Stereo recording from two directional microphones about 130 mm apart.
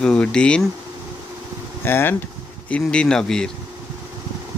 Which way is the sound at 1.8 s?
15° left (ahead or behind).